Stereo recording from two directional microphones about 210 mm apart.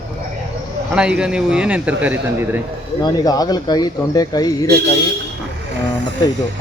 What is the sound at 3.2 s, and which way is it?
A man's voice, 20° left (ahead or behind).